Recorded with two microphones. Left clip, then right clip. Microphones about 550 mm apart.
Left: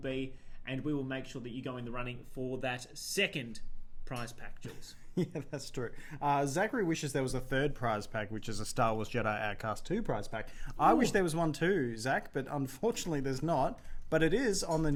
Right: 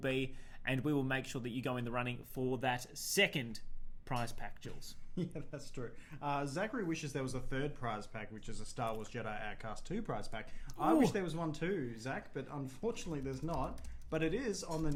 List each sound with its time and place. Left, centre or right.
0.0 s speech: right
5.1 s speech: left